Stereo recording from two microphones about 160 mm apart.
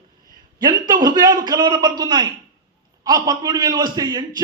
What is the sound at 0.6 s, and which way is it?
A man's voice, 25° right (ahead or behind).